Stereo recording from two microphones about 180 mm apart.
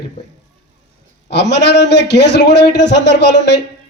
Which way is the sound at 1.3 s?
70° left (ahead or behind).